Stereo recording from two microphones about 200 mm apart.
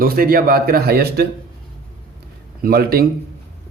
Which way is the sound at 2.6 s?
50° right (ahead or behind).